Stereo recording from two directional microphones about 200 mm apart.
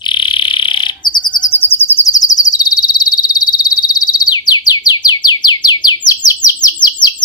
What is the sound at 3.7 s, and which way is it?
Chirp, 20° left (ahead or behind).